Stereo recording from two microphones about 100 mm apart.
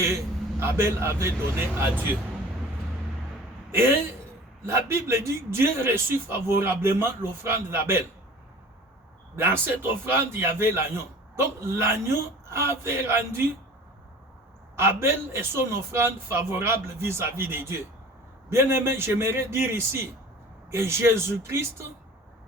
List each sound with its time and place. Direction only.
0.0 s a man's voice: 30° right (ahead or behind)
4.6 s a man's voice: 25° right (ahead or behind)
9.3 s a man's voice: 25° right (ahead or behind)
14.8 s a man's voice: 25° right (ahead or behind)